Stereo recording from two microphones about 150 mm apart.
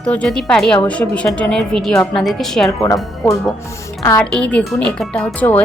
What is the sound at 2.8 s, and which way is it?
Speech, 20° left (ahead or behind).